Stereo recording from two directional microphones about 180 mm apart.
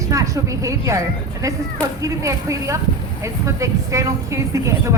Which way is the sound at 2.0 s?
15° right (ahead or behind).